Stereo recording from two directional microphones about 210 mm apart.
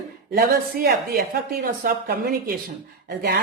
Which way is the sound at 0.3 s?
45° right (ahead or behind).